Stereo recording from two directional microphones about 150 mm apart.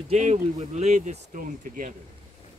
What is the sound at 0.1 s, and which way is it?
Speech, 50° right (ahead or behind).